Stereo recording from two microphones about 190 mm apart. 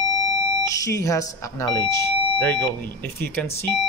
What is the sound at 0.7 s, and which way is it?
Speech, 15° left (ahead or behind).